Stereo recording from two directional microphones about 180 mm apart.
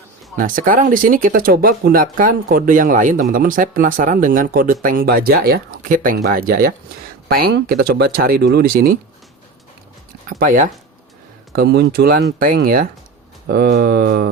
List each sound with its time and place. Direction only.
0.3 s speech: 50° right (ahead or behind)
10.2 s speech: 50° right (ahead or behind)
11.5 s speech: 65° right (ahead or behind)